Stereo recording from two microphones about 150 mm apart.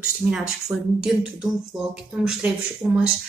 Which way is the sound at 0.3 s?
5° right (ahead or behind).